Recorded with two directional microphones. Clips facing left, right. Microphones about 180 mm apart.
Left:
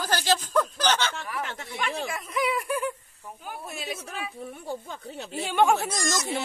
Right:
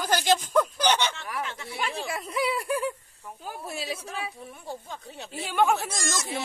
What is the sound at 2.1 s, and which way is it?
Speech, 30° right (ahead or behind).